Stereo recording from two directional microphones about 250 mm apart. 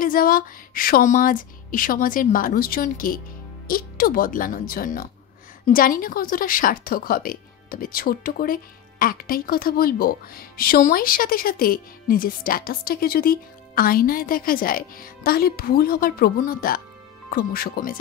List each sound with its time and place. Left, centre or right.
0.0 s a woman's voice: left